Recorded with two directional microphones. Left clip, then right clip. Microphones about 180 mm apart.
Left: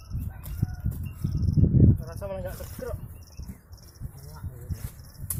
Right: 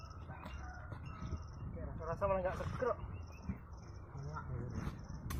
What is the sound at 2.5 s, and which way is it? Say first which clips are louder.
Speech: left 1 dB; 20° left (ahead or behind).